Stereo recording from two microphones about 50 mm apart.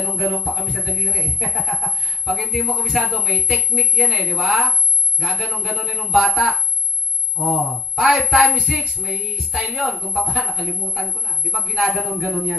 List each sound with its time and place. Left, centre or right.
0.0 s speech: centre
8.5 s a sound: centre
9.3 s speech: centre